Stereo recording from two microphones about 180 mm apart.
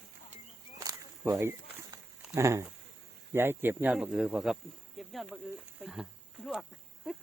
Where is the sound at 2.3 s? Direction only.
15° right (ahead or behind).